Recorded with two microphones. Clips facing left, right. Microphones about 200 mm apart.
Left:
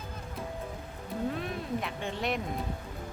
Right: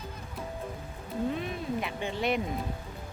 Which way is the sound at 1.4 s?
Centre (ahead or behind).